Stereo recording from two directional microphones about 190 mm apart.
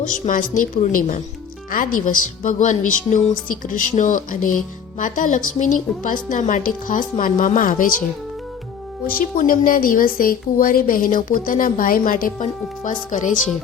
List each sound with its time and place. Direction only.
0.0 s a woman's voice: 45° left (ahead or behind)
9.1 s a woman's voice: 45° left (ahead or behind)